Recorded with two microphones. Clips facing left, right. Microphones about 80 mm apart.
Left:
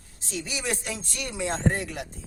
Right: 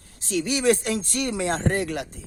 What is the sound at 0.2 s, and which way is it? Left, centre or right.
A man's voice, right.